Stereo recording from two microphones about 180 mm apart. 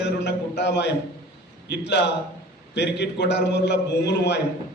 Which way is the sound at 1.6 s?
70° left (ahead or behind).